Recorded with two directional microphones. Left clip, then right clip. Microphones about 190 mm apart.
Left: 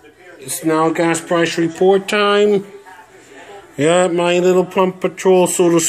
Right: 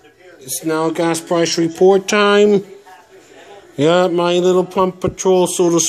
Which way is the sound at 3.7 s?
30° right (ahead or behind).